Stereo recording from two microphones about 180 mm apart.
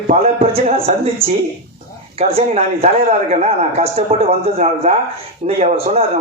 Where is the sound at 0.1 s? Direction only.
35° right (ahead or behind).